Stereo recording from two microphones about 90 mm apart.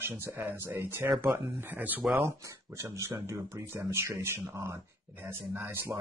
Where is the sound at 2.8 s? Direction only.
30° right (ahead or behind).